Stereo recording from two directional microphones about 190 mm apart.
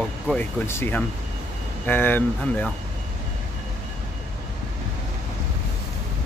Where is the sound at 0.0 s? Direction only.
Centre (ahead or behind).